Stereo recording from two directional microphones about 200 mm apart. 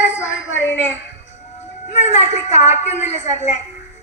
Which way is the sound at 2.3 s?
35° left (ahead or behind).